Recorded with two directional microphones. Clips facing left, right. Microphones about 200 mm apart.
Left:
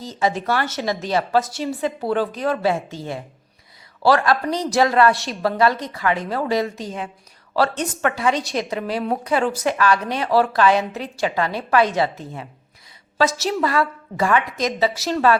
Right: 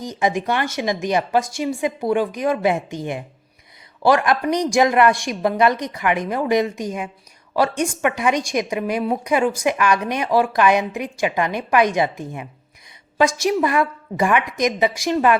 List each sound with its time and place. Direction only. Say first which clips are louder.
0.0 s a woman's voice: right 1 dB; 15° right (ahead or behind)